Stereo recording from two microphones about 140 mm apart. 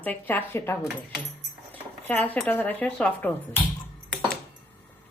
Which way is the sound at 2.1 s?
10° left (ahead or behind).